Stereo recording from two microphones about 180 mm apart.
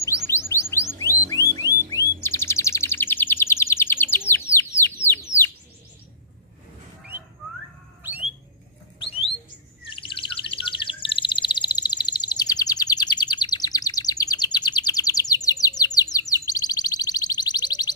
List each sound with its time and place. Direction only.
0.3 s music: 15° left (ahead or behind)
1.0 s music: 10° right (ahead or behind)
2.2 s bird: 15° left (ahead or behind)
4.5 s chicken: 15° left (ahead or behind)
8.0 s alarm: 10° right (ahead or behind)
9.0 s bird: 30° left (ahead or behind)
9.9 s chirp: 30° left (ahead or behind)